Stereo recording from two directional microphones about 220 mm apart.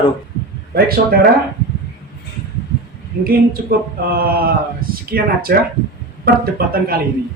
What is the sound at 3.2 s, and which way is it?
Speech, 40° right (ahead or behind).